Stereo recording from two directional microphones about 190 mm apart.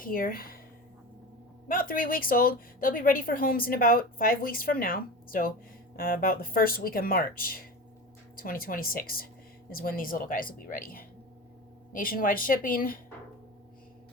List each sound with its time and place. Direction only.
0.0 s speech: 50° left (ahead or behind)
1.6 s speech: 50° left (ahead or behind)